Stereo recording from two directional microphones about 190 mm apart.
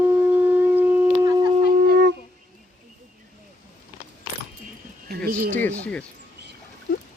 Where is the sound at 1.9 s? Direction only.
60° right (ahead or behind).